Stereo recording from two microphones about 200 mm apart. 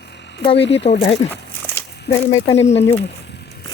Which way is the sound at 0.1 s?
60° left (ahead or behind).